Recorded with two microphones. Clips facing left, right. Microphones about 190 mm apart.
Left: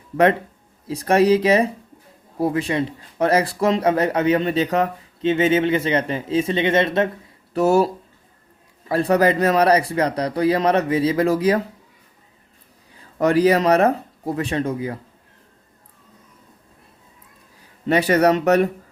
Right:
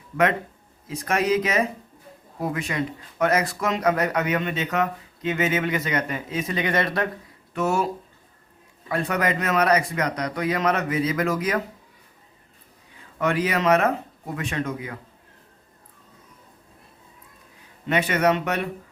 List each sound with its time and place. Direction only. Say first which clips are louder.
0.9 s speech: left 7 dB; 35° left (ahead or behind)
7.5 s speech: left 7 dB; 35° left (ahead or behind)
8.9 s speech: left 7 dB; 35° left (ahead or behind)
13.0 s speech: left 7 dB; 35° left (ahead or behind)
17.8 s speech: left 5 dB; 35° left (ahead or behind)